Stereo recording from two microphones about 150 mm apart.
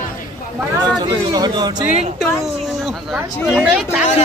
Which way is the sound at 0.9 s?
30° right (ahead or behind).